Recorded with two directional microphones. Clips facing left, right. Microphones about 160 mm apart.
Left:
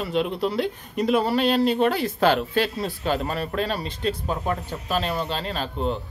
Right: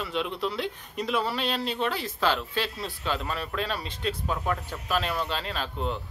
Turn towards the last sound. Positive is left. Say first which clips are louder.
# left 5 dB
turn(degrees=35)  # may be behind; listen again after turning